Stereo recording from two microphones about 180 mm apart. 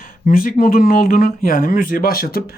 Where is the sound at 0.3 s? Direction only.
50° left (ahead or behind).